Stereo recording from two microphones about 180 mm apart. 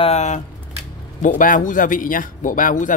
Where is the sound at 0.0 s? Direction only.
40° left (ahead or behind).